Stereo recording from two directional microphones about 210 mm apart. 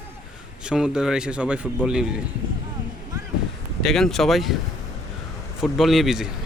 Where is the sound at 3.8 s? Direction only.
Centre (ahead or behind).